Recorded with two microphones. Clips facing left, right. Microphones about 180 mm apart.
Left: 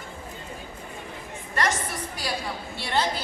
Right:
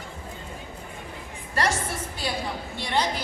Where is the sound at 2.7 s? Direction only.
15° right (ahead or behind).